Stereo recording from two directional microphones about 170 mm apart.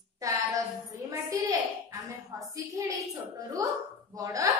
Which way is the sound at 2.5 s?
20° right (ahead or behind).